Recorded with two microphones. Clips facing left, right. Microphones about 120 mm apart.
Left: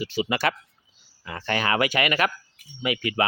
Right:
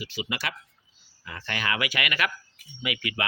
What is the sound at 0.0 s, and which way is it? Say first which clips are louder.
Speech: left 9 dB; 40° left (ahead or behind).